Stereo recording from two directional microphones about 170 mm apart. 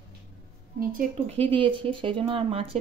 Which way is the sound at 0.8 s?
55° right (ahead or behind).